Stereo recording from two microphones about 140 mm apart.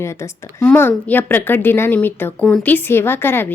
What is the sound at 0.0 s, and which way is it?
A woman's voice, 20° left (ahead or behind).